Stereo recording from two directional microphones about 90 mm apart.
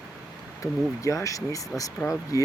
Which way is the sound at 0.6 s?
40° left (ahead or behind).